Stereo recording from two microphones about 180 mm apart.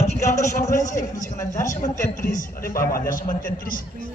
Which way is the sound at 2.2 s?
50° left (ahead or behind).